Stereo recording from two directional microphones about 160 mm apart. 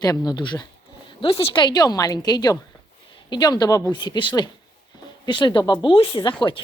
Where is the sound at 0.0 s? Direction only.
25° left (ahead or behind).